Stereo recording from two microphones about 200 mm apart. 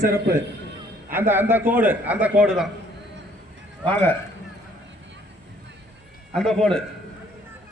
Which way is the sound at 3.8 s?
10° left (ahead or behind).